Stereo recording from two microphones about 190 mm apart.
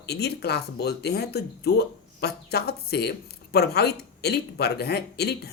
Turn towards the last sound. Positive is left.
turn(degrees=60)  # may be behind; listen again after turning